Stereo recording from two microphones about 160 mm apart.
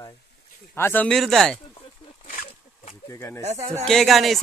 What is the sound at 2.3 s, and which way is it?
Wild animals, 60° left (ahead or behind).